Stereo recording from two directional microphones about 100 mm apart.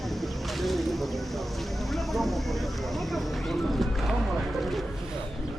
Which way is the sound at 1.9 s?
Centre (ahead or behind).